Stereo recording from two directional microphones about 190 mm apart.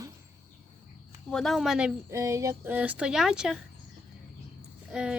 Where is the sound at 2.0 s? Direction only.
15° right (ahead or behind).